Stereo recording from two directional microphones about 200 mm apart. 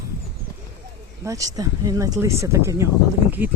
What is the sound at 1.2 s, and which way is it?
Speech, 15° right (ahead or behind).